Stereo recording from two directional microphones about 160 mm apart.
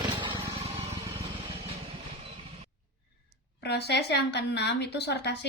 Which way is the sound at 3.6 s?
90° left.